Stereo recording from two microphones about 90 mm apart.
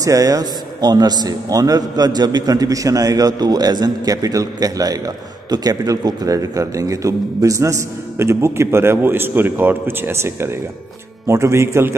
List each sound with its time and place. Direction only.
0.0 s a man's voice: 40° right (ahead or behind)